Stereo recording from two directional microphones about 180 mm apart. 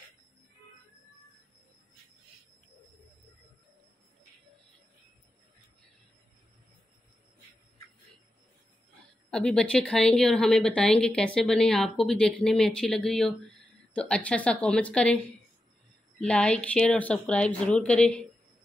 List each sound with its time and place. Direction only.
9.3 s a woman's voice: 5° left (ahead or behind)
16.2 s a woman's voice: 5° left (ahead or behind)